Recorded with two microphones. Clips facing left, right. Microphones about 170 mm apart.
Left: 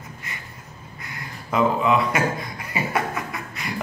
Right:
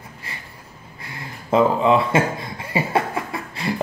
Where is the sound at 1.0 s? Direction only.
30° right (ahead or behind).